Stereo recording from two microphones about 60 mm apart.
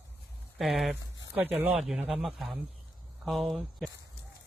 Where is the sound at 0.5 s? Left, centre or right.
Centre.